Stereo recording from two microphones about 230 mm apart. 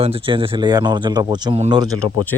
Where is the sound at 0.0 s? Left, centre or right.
Right.